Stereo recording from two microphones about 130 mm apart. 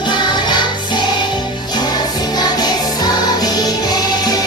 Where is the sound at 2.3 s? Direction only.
30° left (ahead or behind).